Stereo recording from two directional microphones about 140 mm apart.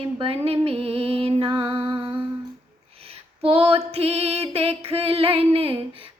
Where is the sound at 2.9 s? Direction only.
45° right (ahead or behind).